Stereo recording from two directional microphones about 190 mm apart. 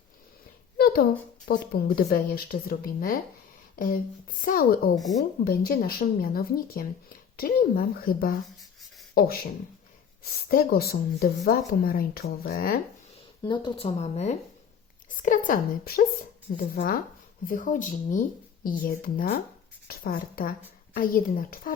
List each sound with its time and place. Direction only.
1.5 s speech: 55° left (ahead or behind)
4.9 s speech: centre (ahead or behind)
5.5 s speech: 55° left (ahead or behind)
10.5 s speech: 50° left (ahead or behind)
13.4 s speech: 25° left (ahead or behind); by 21.7 s 50° left (ahead or behind)